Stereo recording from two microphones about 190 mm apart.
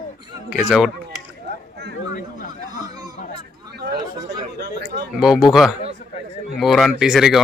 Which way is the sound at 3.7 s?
65° right (ahead or behind).